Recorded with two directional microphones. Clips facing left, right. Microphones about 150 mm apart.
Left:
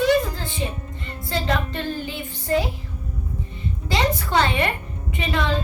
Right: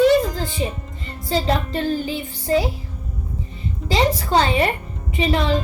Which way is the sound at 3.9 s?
35° right (ahead or behind).